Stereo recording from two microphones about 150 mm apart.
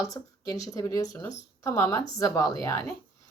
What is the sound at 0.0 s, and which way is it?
A woman's voice, 25° left (ahead or behind).